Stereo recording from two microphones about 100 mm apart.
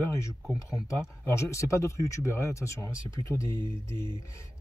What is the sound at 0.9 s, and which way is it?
Speech, 30° left (ahead or behind).